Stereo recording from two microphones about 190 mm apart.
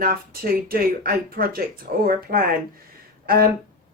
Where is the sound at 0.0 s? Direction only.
50° right (ahead or behind).